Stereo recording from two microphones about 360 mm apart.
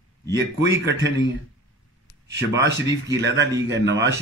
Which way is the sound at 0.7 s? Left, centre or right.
Right.